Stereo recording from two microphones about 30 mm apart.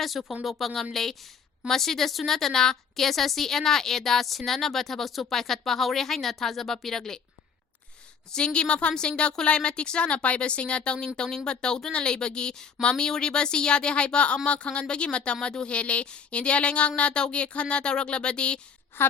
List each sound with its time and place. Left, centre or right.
0.0 s a woman's voice: centre
8.3 s a woman's voice: left
11.2 s a woman's voice: left